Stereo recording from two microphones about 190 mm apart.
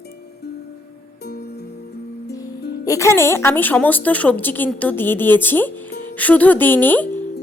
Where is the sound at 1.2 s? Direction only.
60° left (ahead or behind).